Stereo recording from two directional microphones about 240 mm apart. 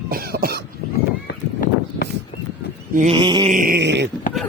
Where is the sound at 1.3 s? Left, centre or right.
Left.